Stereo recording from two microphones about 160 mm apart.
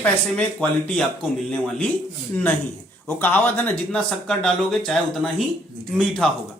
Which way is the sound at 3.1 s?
10° left (ahead or behind).